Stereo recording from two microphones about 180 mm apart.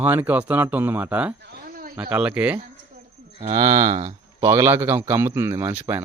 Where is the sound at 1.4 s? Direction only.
55° right (ahead or behind).